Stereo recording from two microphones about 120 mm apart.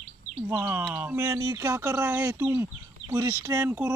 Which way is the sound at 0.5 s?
20° right (ahead or behind).